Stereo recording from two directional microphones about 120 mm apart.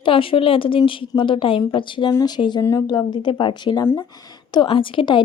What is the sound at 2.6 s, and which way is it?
Speech, 25° left (ahead or behind).